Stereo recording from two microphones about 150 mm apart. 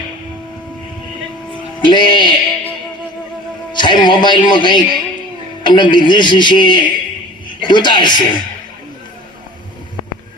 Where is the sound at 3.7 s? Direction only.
30° left (ahead or behind).